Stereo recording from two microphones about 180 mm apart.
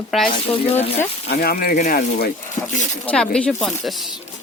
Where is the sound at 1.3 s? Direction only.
60° left (ahead or behind).